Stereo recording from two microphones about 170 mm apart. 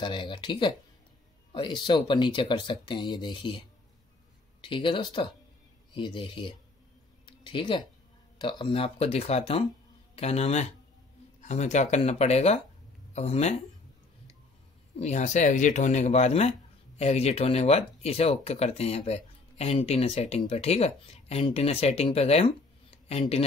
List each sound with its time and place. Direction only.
0.0 s speech: 30° left (ahead or behind)
15.0 s speech: 40° left (ahead or behind)